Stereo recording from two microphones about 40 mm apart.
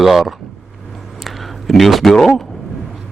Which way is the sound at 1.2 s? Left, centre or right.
Centre.